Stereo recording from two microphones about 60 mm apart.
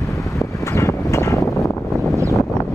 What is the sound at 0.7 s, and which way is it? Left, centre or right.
Vehicle, left.